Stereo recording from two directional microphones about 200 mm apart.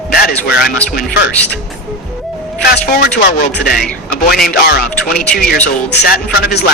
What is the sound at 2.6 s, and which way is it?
Speech, 50° left (ahead or behind).